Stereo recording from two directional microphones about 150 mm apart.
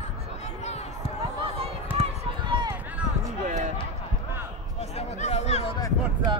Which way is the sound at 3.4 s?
55° right (ahead or behind).